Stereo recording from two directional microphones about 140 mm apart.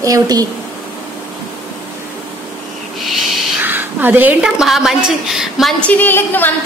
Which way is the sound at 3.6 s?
15° right (ahead or behind).